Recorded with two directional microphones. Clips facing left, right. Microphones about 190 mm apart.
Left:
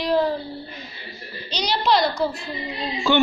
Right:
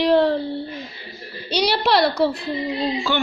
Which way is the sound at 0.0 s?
65° right (ahead or behind).